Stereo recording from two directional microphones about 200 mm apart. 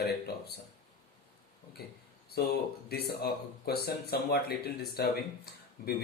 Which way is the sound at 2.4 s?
55° left (ahead or behind).